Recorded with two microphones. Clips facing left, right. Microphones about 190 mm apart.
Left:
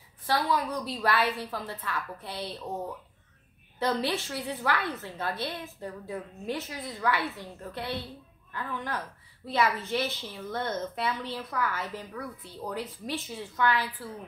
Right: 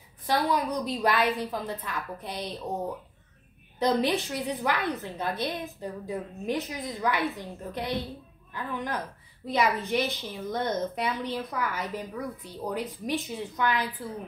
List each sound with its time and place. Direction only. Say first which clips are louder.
0.3 s a woman's voice: right 2 dB; 20° right (ahead or behind)
3.8 s a woman's voice: right 4 dB; 15° right (ahead or behind)